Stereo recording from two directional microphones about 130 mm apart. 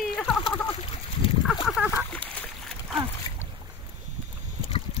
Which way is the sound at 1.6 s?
Centre (ahead or behind).